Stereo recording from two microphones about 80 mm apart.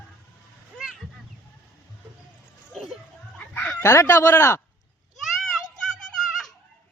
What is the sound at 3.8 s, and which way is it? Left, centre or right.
Speech, left.